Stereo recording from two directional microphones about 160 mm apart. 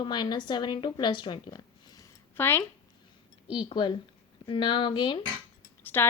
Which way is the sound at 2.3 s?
15° left (ahead or behind).